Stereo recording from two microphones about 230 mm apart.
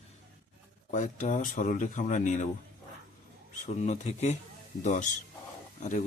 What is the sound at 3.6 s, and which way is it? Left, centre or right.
Speech, left.